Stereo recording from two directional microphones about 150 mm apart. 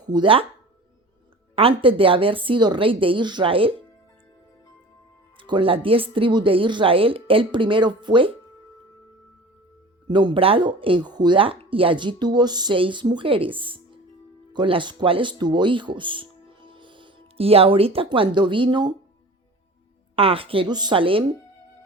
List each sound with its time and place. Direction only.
0.1 s speech: 35° right (ahead or behind)
1.5 s speech: 40° right (ahead or behind)
5.4 s speech: 35° right (ahead or behind)
10.1 s speech: 30° right (ahead or behind)
20.1 s speech: 40° right (ahead or behind)